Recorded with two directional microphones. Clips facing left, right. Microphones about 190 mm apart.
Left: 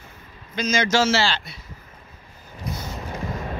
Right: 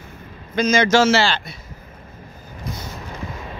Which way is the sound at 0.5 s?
55° right (ahead or behind).